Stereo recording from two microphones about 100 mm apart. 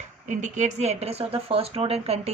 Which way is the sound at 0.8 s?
90° right.